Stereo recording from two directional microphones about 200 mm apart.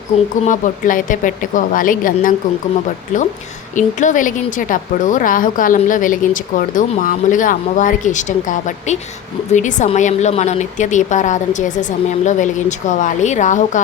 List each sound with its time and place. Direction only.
0.4 s a woman's voice: 40° left (ahead or behind)
3.8 s a woman's voice: 40° left (ahead or behind)